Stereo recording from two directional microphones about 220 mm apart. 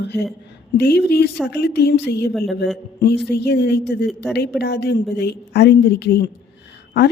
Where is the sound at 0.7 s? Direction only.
50° left (ahead or behind).